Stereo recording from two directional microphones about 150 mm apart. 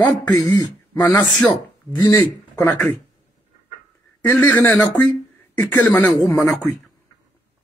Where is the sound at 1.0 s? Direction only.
10° left (ahead or behind).